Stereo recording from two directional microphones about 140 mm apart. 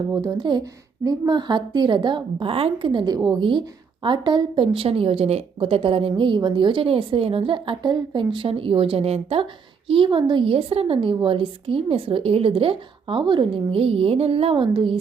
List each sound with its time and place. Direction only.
0.2 s a woman's voice: 30° right (ahead or behind)